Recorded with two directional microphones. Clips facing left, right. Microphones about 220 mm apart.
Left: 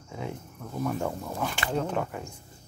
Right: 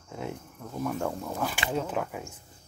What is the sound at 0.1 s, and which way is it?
Cricket, centre (ahead or behind).